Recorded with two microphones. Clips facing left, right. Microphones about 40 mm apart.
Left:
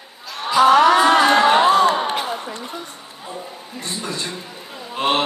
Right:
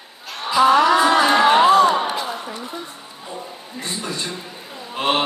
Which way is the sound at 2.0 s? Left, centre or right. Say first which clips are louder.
Left 1 dB; left.